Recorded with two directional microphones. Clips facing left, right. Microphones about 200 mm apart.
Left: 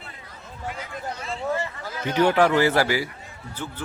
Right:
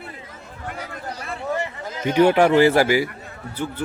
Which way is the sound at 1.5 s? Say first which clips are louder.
Right 2 dB; 20° right (ahead or behind).